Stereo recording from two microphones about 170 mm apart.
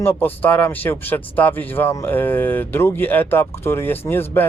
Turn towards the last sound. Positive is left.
turn(degrees=15)  # may be behind; listen again after turning